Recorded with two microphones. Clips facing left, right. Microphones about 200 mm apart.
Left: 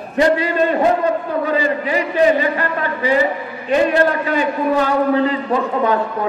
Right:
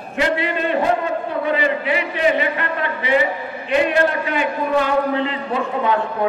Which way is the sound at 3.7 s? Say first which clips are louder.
Left 3 dB; 40° left (ahead or behind).